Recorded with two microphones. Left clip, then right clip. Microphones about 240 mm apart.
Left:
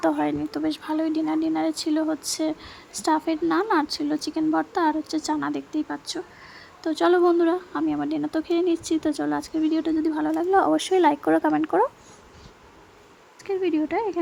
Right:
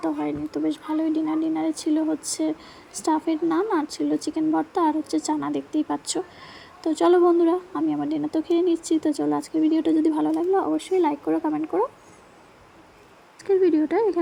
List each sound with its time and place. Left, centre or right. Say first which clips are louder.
0.2 s speech: left 1 dB; centre
10.7 s speech: left 3 dB; centre
13.5 s speech: right 4 dB; centre